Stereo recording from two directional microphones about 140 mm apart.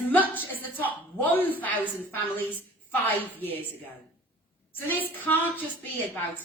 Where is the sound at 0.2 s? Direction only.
15° left (ahead or behind).